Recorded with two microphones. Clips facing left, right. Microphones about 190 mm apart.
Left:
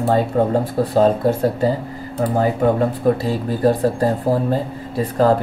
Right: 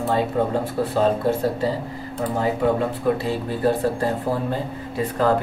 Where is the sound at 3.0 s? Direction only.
40° left (ahead or behind).